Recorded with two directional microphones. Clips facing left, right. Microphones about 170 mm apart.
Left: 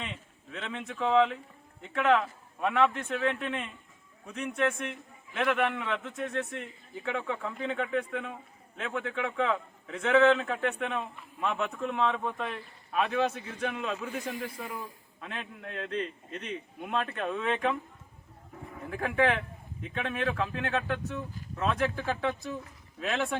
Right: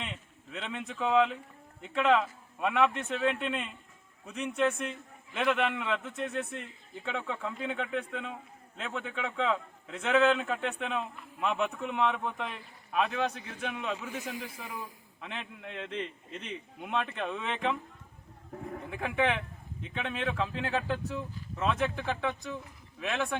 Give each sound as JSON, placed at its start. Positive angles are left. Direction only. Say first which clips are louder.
{"t": 0.5, "sound": "a man's voice", "louder": "even", "side_deg": -5}
{"t": 5.3, "sound": "a man's voice", "louder": "left 1 dB", "side_deg": -10}
{"t": 6.6, "sound": "a man's voice", "louder": "left 3 dB", "side_deg": 5}
{"t": 18.9, "sound": "a man's voice", "louder": "left 3 dB", "side_deg": 0}